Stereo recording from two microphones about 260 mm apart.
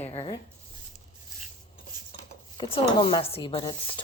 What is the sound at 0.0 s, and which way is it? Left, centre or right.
Writing, left.